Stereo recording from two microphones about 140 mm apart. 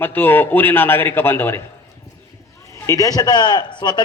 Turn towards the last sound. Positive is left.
turn(degrees=30)  # may be behind; listen again after turning